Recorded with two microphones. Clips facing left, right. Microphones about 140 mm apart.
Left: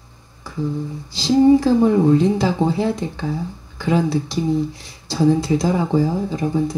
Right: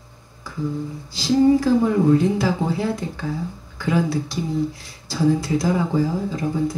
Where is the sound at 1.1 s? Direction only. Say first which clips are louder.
Left 3 dB; 25° left (ahead or behind).